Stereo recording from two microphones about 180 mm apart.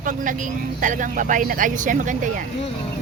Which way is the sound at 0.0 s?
45° right (ahead or behind).